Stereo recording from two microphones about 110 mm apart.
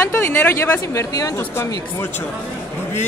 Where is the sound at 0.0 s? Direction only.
20° left (ahead or behind).